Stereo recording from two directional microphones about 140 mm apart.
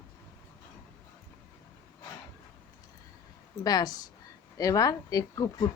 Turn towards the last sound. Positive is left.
turn(degrees=25)  # may be behind; listen again after turning